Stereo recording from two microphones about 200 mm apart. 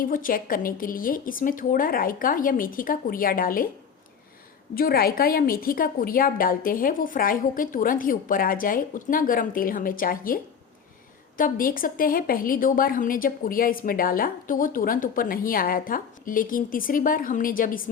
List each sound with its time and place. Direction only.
0.0 s a woman's voice: 45° left (ahead or behind)
4.7 s a woman's voice: 50° left (ahead or behind)